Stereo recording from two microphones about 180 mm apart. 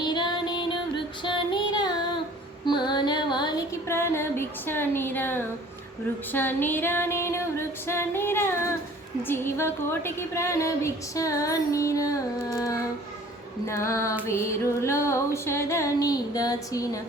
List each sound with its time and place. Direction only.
0.0 s music: 25° left (ahead or behind)
1.2 s female singing: 25° left (ahead or behind)
2.6 s music: 25° left (ahead or behind)
6.3 s a woman's voice: 10° left (ahead or behind)